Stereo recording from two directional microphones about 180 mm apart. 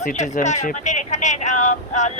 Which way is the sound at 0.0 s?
40° left (ahead or behind).